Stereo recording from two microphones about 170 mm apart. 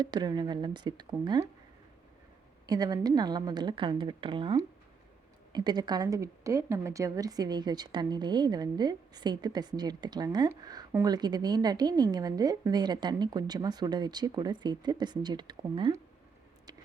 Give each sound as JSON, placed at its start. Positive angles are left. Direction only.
{"t": 0.0, "sound": "a woman's voice", "side_deg": -25}
{"t": 2.6, "sound": "a woman's voice", "side_deg": -20}